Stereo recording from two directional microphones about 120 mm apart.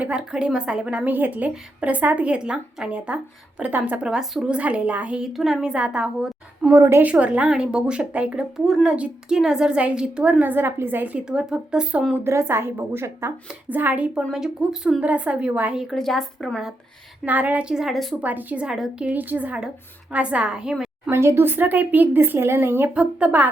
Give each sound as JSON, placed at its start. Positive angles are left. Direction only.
{"t": 0.0, "sound": "a woman's voice", "side_deg": -10}
{"t": 6.7, "sound": "speech", "side_deg": -20}
{"t": 7.1, "sound": "a woman's voice", "side_deg": -10}
{"t": 14.2, "sound": "a woman's voice", "side_deg": 0}
{"t": 17.2, "sound": "a woman's voice", "side_deg": -15}
{"t": 18.2, "sound": "a woman's voice", "side_deg": -15}
{"t": 21.1, "sound": "a woman's voice", "side_deg": -20}